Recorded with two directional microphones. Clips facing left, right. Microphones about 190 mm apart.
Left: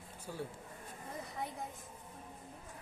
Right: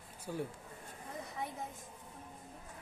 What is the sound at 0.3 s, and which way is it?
Speech, 15° right (ahead or behind).